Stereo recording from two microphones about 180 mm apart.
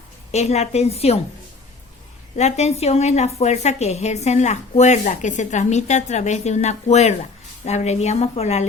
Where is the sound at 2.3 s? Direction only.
40° left (ahead or behind).